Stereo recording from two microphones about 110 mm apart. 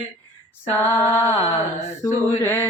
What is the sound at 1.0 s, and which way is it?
Mantra, 20° left (ahead or behind).